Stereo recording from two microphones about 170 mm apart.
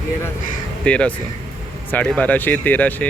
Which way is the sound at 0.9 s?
5° left (ahead or behind).